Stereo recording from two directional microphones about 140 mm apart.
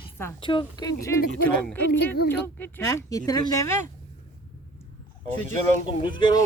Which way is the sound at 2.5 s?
15° left (ahead or behind).